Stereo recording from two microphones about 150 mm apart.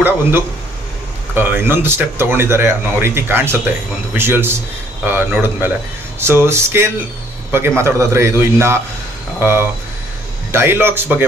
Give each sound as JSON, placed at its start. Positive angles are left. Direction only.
{"t": 1.3, "sound": "speech", "side_deg": -15}